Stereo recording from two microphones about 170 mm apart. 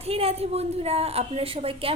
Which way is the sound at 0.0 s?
35° right (ahead or behind).